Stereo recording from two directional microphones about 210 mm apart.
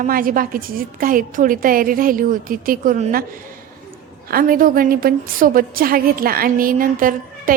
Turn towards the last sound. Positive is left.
turn(degrees=-40)  # may be behind; listen again after turning